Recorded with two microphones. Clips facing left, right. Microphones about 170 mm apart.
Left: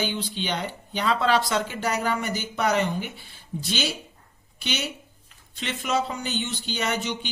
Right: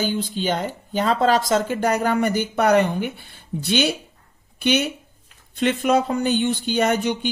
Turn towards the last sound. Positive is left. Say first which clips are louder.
# right 8 dB
turn(degrees=-50)  # may be behind; listen again after turning